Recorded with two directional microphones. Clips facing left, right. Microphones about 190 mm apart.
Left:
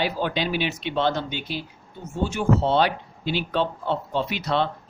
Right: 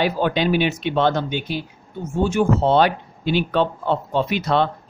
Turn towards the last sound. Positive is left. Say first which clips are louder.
# right 5 dB
turn(degrees=-50)  # may be behind; listen again after turning